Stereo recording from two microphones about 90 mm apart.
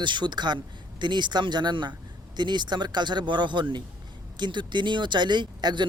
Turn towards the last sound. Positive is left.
turn(degrees=-60)  # may be behind; listen again after turning